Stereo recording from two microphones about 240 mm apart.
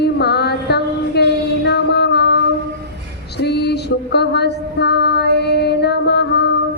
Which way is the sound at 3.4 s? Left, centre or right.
Left.